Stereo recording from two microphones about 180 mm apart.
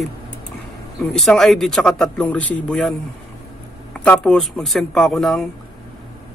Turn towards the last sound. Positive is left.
turn(degrees=0)  # may be behind; listen again after turning